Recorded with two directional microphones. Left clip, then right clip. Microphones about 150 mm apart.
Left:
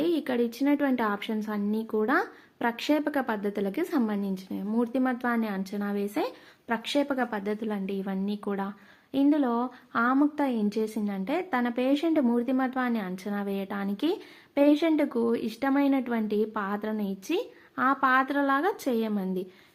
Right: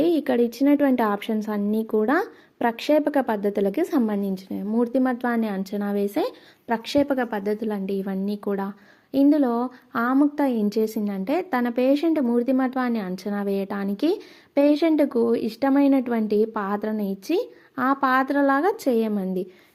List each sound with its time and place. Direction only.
0.0 s a woman's voice: 40° right (ahead or behind)